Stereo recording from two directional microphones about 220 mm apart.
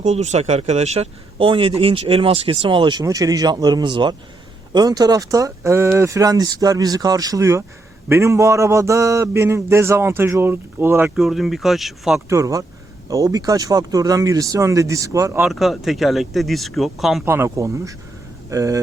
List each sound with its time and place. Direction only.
0.0 s speech: 30° right (ahead or behind); by 12.2 s centre (ahead or behind)
12.3 s speech: 15° right (ahead or behind)
17.2 s speech: 10° right (ahead or behind)